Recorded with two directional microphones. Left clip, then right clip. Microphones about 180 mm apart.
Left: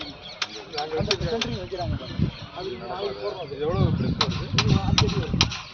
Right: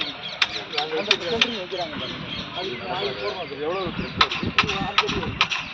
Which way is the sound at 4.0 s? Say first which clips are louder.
Right 5 dB; 70° left (ahead or behind).